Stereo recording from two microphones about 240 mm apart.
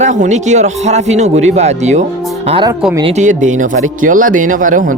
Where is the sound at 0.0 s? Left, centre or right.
Right.